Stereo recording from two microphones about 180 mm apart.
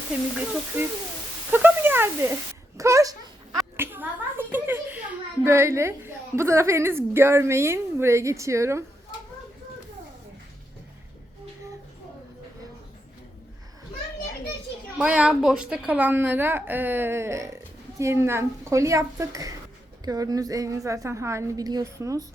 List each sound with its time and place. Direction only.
1.5 s speech: 10° right (ahead or behind)
2.7 s dog: 15° right (ahead or behind)
3.8 s a woman's voice: 10° right (ahead or behind)
14.9 s a woman's voice: 5° right (ahead or behind)